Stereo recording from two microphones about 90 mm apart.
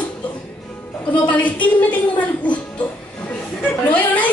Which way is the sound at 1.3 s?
15° left (ahead or behind).